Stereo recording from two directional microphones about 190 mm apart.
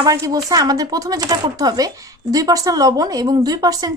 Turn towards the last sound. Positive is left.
turn(degrees=-20)  # may be behind; listen again after turning